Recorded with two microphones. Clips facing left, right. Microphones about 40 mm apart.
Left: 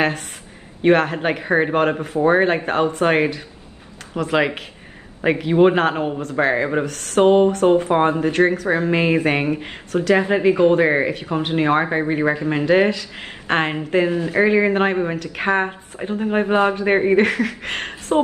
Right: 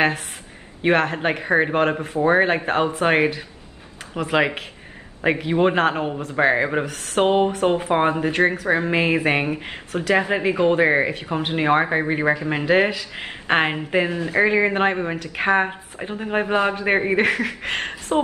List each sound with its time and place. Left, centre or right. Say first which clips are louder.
0.8 s speech: left 3 dB; centre
14.1 s speech: left 2 dB; right
14.4 s speech: left 2 dB; centre